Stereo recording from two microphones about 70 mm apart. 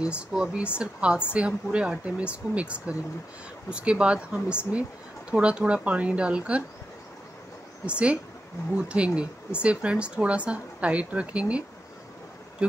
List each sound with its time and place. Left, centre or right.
0.0 s speech: centre
7.8 s speech: centre